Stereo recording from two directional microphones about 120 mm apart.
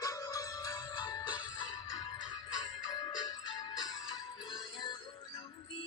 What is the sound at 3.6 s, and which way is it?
Music, 40° left (ahead or behind).